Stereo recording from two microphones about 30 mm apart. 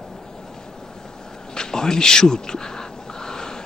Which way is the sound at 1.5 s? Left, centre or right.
Left.